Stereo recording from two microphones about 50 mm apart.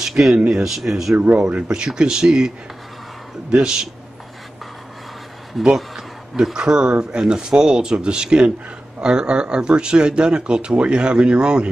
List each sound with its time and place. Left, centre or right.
0.0 s speech: centre
1.1 s speech: right
1.5 s speech: centre
3.5 s speech: centre
5.5 s speech: centre